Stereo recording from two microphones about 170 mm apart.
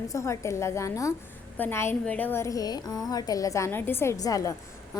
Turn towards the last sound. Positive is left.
turn(degrees=20)  # may be behind; listen again after turning